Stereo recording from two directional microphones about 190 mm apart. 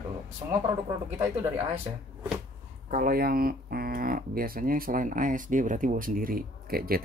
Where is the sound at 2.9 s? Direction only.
50° right (ahead or behind).